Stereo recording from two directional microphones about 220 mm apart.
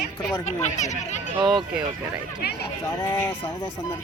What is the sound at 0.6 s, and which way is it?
Speech, 30° left (ahead or behind).